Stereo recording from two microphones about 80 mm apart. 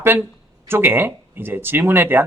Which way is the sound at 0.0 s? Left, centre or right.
Right.